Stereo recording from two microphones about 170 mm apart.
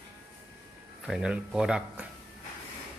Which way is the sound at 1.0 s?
5° right (ahead or behind).